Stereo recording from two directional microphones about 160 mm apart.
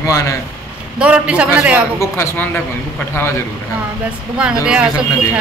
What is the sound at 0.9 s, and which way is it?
Speech, 5° right (ahead or behind).